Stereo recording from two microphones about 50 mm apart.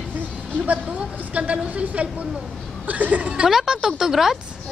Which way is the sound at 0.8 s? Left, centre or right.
Right.